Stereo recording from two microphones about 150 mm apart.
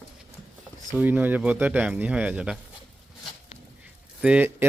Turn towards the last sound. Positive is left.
turn(degrees=-10)  # may be behind; listen again after turning